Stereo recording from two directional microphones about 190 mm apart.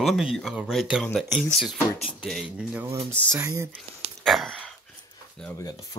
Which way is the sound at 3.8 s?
Centre (ahead or behind).